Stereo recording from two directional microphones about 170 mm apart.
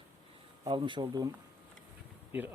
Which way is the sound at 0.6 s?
25° right (ahead or behind).